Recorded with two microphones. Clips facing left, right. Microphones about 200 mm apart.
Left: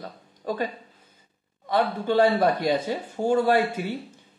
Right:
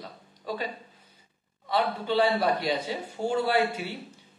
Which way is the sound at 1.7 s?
50° left (ahead or behind).